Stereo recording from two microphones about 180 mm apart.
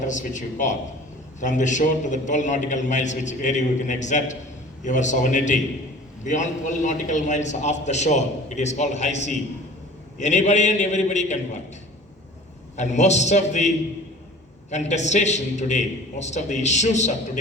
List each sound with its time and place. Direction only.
0.0 s a man's voice: 45° left (ahead or behind)
12.7 s a man's voice: 40° left (ahead or behind)